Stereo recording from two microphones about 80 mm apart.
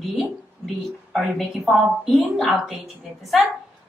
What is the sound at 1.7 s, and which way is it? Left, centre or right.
Speech, centre.